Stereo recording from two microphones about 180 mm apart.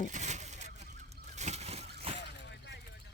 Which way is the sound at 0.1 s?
40° right (ahead or behind).